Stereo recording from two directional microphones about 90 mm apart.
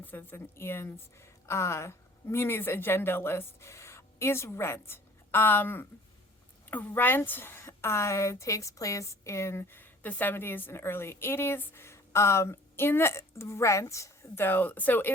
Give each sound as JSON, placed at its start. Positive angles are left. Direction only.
{"t": 0.0, "sound": "a woman's voice", "side_deg": 20}